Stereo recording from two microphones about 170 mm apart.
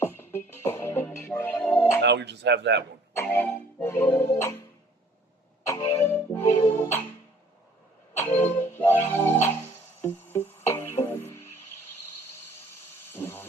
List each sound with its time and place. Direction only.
0.0 s music: 15° left (ahead or behind)
2.0 s speech: 90° right
3.3 s music: 15° left (ahead or behind)
5.6 s music: 15° left (ahead or behind)
8.1 s music: 15° left (ahead or behind)
13.1 s a sound: 15° left (ahead or behind)